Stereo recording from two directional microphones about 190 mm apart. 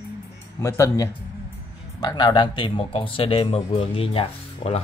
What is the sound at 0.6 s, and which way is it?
A man's voice, 15° left (ahead or behind).